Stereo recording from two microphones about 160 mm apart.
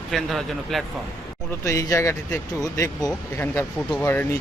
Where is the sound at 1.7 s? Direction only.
20° left (ahead or behind).